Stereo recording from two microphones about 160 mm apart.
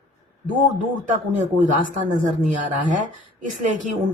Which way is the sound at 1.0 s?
50° right (ahead or behind).